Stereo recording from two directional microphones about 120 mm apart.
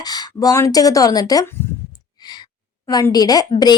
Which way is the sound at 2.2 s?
35° left (ahead or behind).